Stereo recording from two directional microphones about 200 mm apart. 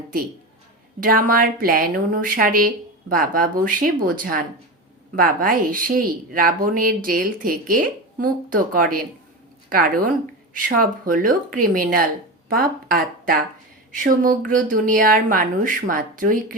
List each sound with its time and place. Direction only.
0.9 s a woman's voice: 45° right (ahead or behind)